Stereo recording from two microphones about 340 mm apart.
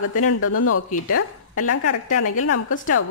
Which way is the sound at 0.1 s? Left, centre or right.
Left.